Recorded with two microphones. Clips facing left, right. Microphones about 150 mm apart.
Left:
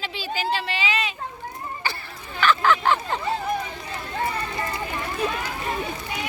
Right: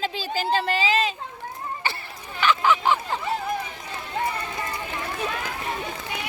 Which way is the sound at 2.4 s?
15° right (ahead or behind).